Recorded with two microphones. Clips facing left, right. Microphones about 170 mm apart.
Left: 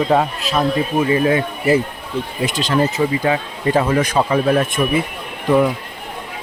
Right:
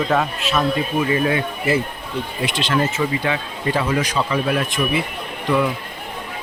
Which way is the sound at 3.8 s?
55° left (ahead or behind).